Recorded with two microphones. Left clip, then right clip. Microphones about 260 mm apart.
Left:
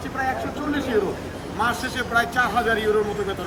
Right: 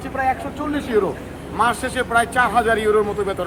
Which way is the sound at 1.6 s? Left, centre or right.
Right.